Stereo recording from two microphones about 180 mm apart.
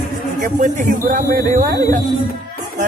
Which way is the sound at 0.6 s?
50° right (ahead or behind).